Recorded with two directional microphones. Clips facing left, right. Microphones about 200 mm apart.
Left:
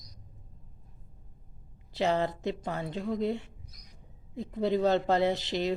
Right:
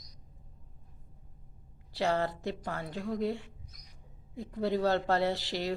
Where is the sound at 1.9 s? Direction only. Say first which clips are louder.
Left 2 dB; 20° left (ahead or behind).